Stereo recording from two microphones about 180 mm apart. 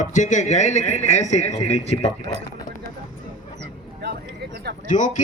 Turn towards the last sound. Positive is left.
turn(degrees=45)  # may be behind; listen again after turning